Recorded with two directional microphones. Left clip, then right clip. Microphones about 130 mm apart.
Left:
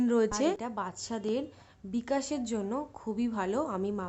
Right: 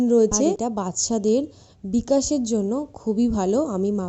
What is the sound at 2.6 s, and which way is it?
A woman's voice, 10° right (ahead or behind).